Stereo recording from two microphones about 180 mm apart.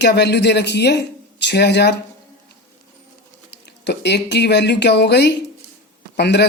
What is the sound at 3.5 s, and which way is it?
Speech, 70° left (ahead or behind).